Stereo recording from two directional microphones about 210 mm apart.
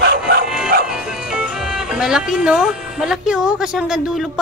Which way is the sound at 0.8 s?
5° right (ahead or behind).